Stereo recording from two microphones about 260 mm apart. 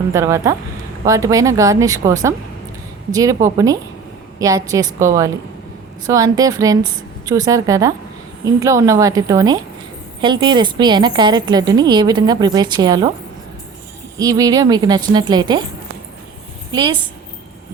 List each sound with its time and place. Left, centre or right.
0.1 s a woman's voice: centre
14.2 s a woman's voice: centre
16.7 s a woman's voice: centre